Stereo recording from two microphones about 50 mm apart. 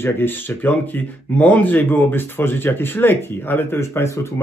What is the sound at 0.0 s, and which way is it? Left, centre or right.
Speech, left.